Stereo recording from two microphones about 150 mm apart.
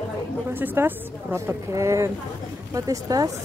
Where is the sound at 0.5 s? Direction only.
15° right (ahead or behind).